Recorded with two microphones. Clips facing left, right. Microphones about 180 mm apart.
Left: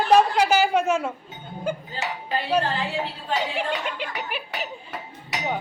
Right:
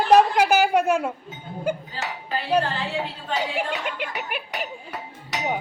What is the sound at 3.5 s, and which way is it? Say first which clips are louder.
Speech: even; 5° right (ahead or behind).